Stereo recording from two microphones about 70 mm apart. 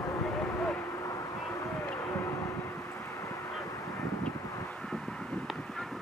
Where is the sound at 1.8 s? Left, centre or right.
Left.